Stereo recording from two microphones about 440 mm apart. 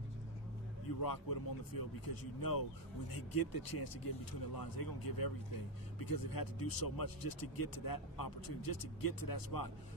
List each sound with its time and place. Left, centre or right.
0.8 s speech: left